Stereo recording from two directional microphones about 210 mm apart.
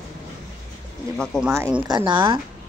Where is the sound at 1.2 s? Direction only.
Centre (ahead or behind).